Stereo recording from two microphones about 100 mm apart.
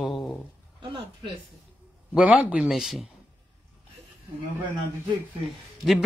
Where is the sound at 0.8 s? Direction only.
55° right (ahead or behind).